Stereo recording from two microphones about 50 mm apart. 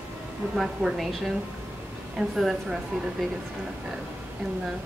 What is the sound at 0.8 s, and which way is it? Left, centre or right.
Speech, centre.